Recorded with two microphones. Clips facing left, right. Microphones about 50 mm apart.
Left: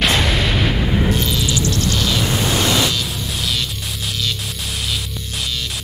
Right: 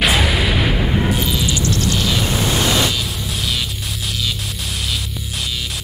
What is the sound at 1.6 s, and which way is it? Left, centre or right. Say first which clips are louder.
Music: even; right.